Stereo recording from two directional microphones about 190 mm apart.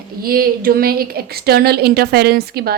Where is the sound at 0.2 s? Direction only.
50° right (ahead or behind).